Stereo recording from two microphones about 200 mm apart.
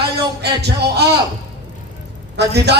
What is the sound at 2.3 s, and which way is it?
Speech, 55° right (ahead or behind).